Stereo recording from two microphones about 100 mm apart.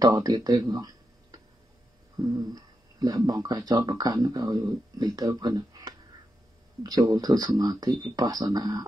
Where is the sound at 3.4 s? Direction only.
45° right (ahead or behind).